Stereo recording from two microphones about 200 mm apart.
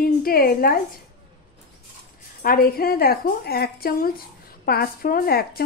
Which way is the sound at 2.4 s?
45° left (ahead or behind).